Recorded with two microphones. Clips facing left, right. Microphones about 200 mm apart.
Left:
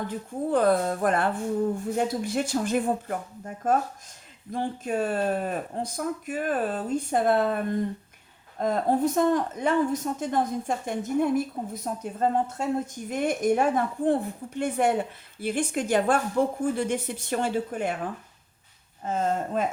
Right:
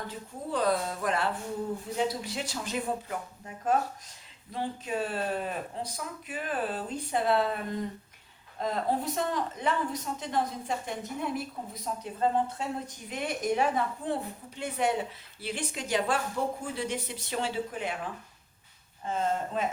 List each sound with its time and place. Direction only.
0.1 s a woman's voice: 50° left (ahead or behind)